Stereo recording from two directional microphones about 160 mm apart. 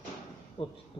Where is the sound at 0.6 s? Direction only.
35° left (ahead or behind).